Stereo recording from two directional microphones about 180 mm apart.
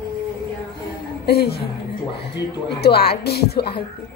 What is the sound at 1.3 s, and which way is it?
Speech, 60° left (ahead or behind).